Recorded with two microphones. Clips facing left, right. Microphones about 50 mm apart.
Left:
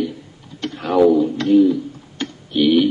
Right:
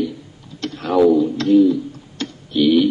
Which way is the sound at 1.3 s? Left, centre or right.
Centre.